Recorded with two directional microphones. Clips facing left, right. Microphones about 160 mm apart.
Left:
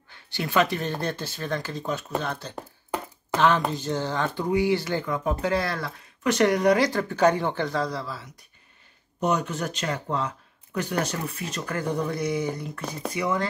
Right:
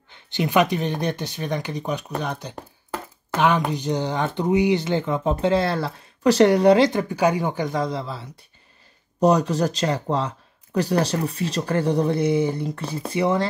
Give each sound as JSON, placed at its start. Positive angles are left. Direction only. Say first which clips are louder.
{"t": 0.1, "sound": "speech", "louder": "right 5 dB", "side_deg": -20}